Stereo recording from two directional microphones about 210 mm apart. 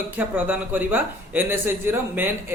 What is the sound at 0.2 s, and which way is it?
Speech, 10° right (ahead or behind).